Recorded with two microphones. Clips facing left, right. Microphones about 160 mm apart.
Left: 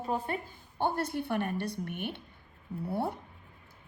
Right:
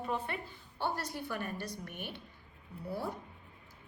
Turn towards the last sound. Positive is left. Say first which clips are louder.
# left 5 dB
turn(degrees=60)  # may be behind; listen again after turning